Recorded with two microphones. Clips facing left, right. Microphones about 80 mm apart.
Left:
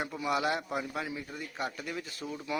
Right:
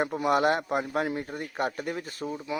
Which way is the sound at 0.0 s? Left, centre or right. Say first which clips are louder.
Right 7 dB; right.